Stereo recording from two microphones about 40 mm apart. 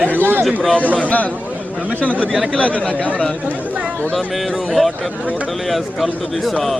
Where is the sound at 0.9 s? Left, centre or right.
Left.